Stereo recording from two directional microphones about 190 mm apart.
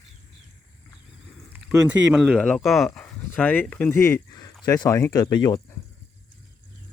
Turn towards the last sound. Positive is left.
turn(degrees=20)  # may be behind; listen again after turning